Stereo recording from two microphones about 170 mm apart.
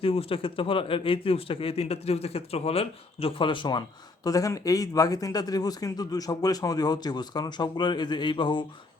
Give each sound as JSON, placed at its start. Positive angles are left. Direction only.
{"t": 0.0, "sound": "speech", "side_deg": 35}